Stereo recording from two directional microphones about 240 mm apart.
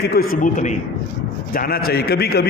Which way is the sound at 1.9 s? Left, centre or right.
Left.